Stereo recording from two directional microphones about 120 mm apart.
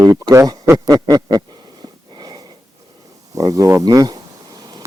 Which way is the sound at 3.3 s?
30° right (ahead or behind).